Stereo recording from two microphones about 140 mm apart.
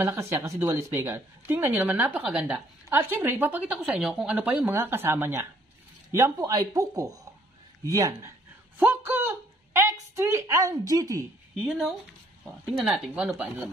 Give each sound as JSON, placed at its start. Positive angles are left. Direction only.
{"t": 0.0, "sound": "a man's voice", "side_deg": -20}
{"t": 12.7, "sound": "speech", "side_deg": -5}